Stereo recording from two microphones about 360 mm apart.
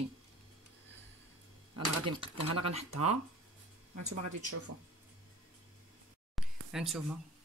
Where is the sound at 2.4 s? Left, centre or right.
Right.